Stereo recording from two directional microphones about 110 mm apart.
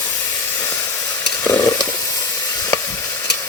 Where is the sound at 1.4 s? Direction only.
25° left (ahead or behind).